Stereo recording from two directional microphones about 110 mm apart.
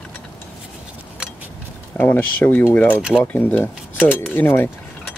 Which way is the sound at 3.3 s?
15° left (ahead or behind).